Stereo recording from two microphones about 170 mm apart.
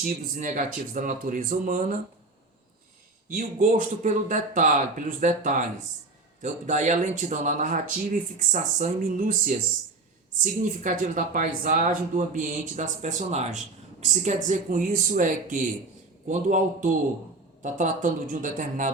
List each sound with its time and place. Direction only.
0.0 s speech: 50° right (ahead or behind)
3.2 s speech: 50° right (ahead or behind)